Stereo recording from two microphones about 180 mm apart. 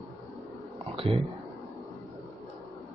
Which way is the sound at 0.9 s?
30° right (ahead or behind).